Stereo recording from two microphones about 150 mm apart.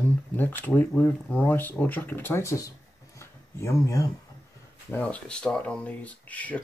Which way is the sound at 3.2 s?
20° left (ahead or behind).